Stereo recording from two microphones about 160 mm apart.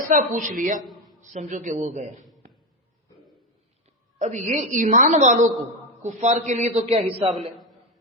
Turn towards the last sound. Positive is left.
turn(degrees=-40)  # may be behind; listen again after turning